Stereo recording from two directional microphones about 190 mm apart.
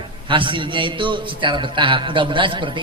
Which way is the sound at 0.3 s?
25° right (ahead or behind).